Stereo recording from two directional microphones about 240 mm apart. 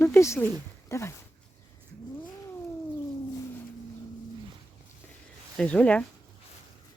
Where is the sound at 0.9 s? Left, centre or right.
Centre.